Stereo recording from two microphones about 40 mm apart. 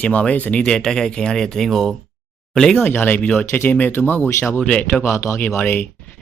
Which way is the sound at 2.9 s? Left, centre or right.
Left.